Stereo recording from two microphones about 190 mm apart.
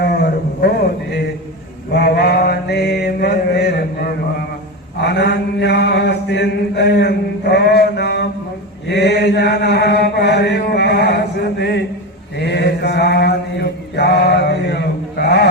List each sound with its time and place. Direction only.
0.0 s a sound: 55° left (ahead or behind)
1.9 s mantra: 60° left (ahead or behind)
5.0 s mantra: 60° left (ahead or behind)